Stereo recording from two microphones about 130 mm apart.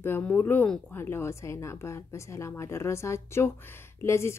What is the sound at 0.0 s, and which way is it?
Speech, 15° left (ahead or behind).